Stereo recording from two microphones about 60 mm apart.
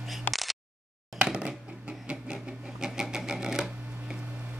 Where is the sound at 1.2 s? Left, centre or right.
Centre.